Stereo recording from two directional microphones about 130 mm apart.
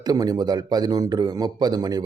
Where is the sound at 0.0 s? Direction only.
30° right (ahead or behind).